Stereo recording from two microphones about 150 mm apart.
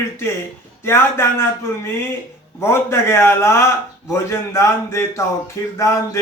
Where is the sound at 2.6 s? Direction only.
15° left (ahead or behind).